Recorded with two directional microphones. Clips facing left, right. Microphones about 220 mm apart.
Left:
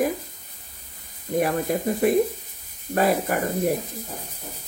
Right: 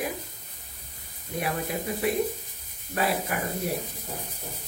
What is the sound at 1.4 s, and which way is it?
Speech, 45° left (ahead or behind).